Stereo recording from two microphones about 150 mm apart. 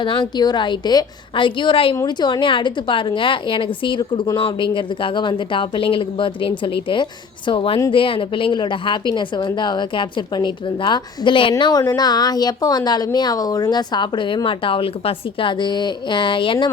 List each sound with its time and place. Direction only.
0.0 s a woman's voice: 30° left (ahead or behind)